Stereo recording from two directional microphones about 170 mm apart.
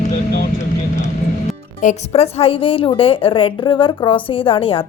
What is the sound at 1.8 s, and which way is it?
A woman's voice, 45° left (ahead or behind).